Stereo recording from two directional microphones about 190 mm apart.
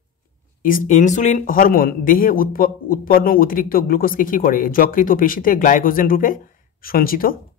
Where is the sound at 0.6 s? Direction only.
45° left (ahead or behind).